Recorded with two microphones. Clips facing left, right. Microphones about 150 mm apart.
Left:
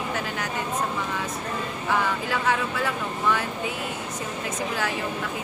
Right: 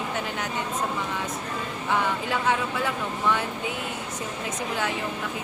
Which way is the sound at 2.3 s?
20° right (ahead or behind).